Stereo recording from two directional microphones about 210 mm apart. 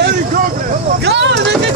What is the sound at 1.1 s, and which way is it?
Vehicle, 55° right (ahead or behind).